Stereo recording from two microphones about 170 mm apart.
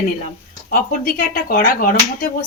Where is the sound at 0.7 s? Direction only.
60° left (ahead or behind).